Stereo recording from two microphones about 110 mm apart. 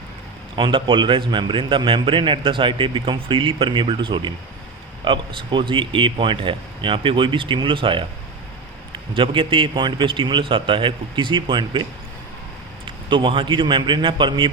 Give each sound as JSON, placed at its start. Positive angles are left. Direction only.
{"t": 0.5, "sound": "a man's voice", "side_deg": -50}